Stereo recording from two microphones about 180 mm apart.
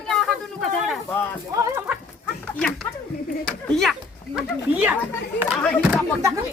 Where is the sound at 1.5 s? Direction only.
15° right (ahead or behind).